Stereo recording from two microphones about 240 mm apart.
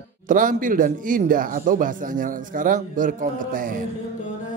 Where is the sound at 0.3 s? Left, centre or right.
Right.